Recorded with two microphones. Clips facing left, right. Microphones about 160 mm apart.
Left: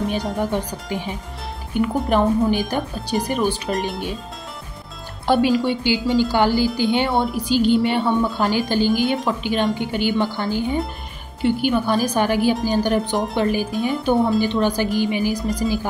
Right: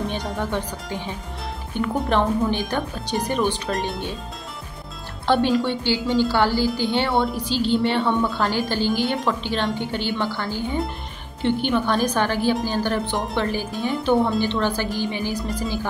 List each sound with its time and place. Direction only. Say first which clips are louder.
0.1 s speech: left 4 dB; 10° left (ahead or behind)
5.2 s speech: left 2 dB; 10° left (ahead or behind)